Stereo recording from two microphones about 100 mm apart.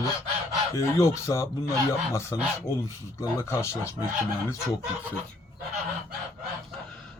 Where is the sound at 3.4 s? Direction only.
25° left (ahead or behind).